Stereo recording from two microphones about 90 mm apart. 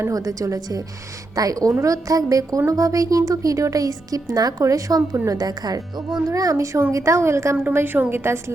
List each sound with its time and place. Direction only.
0.0 s a woman's voice: 40° right (ahead or behind)